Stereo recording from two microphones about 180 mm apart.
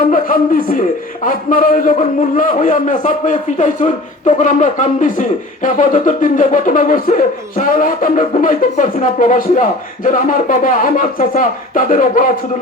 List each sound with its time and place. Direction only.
0.1 s a man's voice: 50° left (ahead or behind)